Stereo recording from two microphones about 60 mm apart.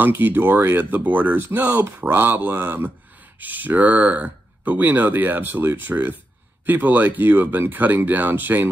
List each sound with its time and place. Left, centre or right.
0.0 s speech: right